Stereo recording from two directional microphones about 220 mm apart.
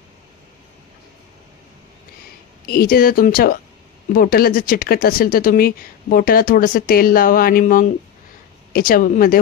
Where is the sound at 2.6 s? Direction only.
45° left (ahead or behind).